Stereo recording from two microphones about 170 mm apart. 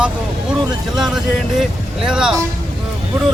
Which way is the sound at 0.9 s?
5° right (ahead or behind).